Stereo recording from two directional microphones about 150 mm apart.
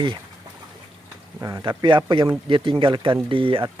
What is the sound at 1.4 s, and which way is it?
Speech, 25° right (ahead or behind).